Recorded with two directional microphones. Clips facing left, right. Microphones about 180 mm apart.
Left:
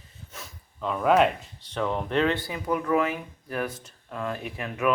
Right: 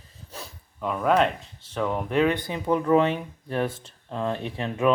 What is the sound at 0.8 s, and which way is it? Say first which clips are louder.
Speech: left 1 dB; 5° right (ahead or behind).